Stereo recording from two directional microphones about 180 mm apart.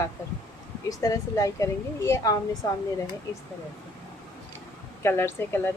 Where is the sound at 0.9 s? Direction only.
20° left (ahead or behind).